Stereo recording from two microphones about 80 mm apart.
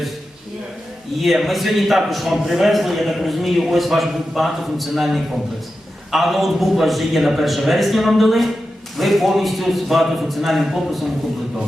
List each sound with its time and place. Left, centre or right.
1.2 s a man's voice: centre